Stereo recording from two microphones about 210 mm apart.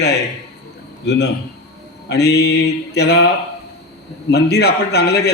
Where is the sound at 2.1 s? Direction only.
50° left (ahead or behind).